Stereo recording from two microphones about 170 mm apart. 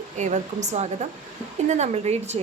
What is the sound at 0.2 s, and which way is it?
Speech, 45° right (ahead or behind).